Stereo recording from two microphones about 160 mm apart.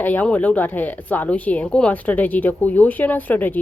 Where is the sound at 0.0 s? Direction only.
10° left (ahead or behind).